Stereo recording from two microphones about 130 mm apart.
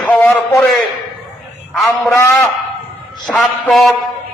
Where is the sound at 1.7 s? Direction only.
Centre (ahead or behind).